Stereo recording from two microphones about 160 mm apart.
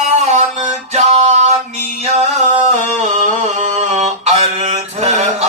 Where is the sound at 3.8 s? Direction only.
45° right (ahead or behind).